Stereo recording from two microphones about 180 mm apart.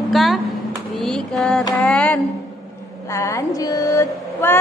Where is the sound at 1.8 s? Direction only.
5° left (ahead or behind).